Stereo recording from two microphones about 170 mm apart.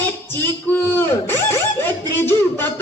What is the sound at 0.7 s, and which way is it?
Speech, 15° left (ahead or behind).